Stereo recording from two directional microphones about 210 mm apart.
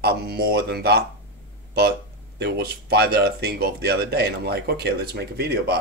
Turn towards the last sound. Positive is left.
turn(degrees=-50)  # may be behind; listen again after turning